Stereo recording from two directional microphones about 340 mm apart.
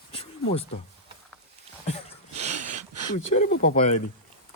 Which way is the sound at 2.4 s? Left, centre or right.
Centre.